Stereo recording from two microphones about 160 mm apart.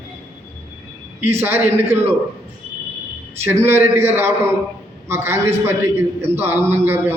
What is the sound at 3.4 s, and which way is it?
A man's voice, 15° right (ahead or behind).